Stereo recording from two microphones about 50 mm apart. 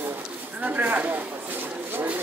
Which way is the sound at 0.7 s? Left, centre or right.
Right.